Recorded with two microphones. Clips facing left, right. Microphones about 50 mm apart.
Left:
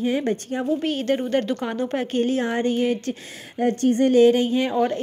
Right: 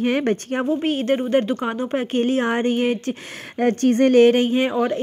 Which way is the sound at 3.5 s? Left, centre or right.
Right.